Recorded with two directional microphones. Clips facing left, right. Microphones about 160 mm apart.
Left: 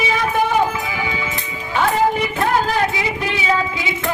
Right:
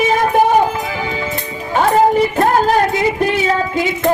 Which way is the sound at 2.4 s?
45° right (ahead or behind).